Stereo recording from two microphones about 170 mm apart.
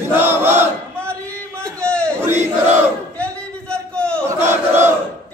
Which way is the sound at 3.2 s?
5° left (ahead or behind).